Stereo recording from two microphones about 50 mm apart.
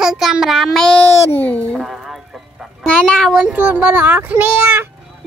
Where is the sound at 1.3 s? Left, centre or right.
Left.